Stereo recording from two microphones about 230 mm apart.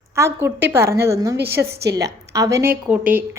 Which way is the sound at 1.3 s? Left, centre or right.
Right.